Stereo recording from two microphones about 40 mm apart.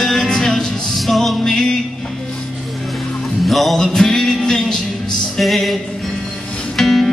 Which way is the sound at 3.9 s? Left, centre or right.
Centre.